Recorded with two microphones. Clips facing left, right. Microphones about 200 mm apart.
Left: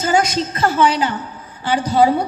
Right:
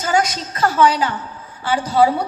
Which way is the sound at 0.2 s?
30° left (ahead or behind).